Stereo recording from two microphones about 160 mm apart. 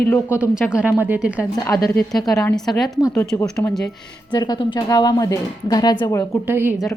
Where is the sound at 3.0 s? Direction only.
15° left (ahead or behind).